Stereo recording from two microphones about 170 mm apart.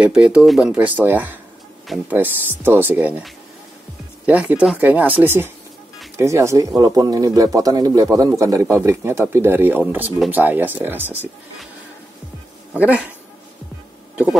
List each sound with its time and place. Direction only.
0.0 s speech: 5° right (ahead or behind)
4.3 s speech: 10° right (ahead or behind)
12.7 s speech: 10° right (ahead or behind)
14.1 s speech: 10° right (ahead or behind)